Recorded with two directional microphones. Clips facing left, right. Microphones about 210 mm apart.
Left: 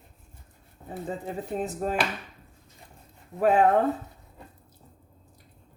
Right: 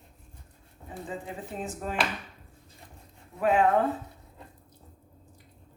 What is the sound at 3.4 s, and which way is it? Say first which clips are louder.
Speech: left 3 dB; 40° left (ahead or behind).